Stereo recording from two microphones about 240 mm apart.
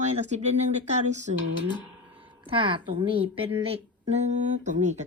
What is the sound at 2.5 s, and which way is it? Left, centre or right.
A woman's voice, right.